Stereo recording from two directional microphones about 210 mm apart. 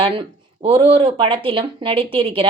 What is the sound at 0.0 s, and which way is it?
Speech, 25° right (ahead or behind).